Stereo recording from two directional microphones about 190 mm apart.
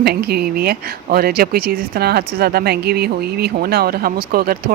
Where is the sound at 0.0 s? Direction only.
60° right (ahead or behind).